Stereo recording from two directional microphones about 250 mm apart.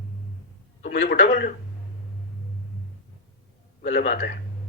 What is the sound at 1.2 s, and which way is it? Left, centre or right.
Speech, left.